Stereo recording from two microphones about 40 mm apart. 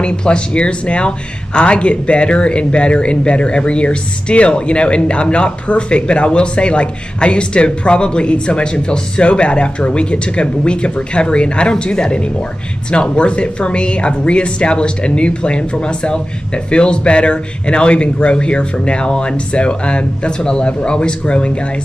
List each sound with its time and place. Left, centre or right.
0.0 s speech: left